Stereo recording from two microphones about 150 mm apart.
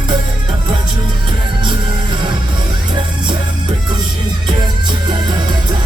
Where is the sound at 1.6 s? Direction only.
30° right (ahead or behind).